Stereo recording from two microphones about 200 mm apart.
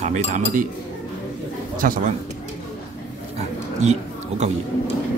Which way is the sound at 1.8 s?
45° right (ahead or behind).